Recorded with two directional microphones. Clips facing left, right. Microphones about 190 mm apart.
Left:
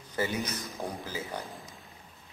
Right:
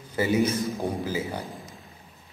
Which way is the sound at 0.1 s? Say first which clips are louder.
Right 9 dB; 10° right (ahead or behind).